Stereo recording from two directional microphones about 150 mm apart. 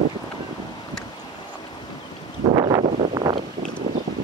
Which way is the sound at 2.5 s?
25° right (ahead or behind).